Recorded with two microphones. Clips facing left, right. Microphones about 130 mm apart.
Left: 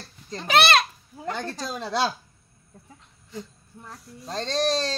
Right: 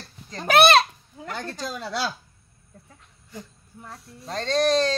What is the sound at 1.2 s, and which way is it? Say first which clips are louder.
Speech: left 2 dB; 30° left (ahead or behind).